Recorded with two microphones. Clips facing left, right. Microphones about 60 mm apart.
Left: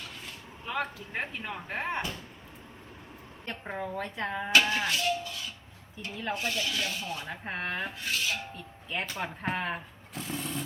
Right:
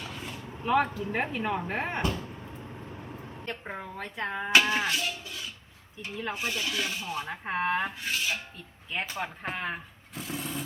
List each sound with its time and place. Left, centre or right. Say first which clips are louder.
0.7 s speech: right 8 dB; centre
3.4 s speech: left 2 dB; centre
6.3 s speech: left 1 dB; centre
8.5 s speech: even; centre